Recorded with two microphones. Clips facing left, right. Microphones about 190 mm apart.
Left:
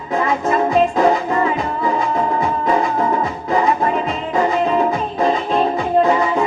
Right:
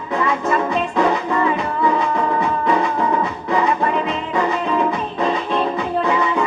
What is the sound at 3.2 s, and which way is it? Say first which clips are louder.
Music: left 1 dB; 35° left (ahead or behind).